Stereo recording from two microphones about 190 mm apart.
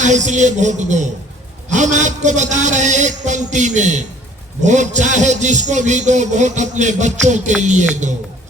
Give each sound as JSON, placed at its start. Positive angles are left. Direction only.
{"t": 0.0, "sound": "a man's voice", "side_deg": -40}